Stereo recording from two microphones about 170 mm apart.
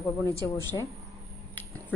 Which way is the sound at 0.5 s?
15° left (ahead or behind).